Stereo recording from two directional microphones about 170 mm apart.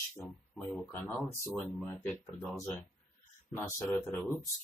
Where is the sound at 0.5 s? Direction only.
5° left (ahead or behind).